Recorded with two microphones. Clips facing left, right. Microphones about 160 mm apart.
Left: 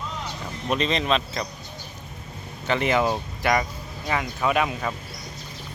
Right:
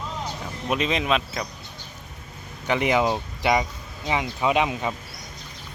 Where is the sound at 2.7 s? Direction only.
15° right (ahead or behind).